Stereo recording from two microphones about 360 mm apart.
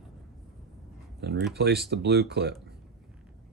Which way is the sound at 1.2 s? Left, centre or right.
Right.